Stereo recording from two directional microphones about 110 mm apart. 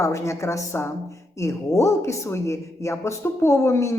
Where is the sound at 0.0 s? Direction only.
25° left (ahead or behind).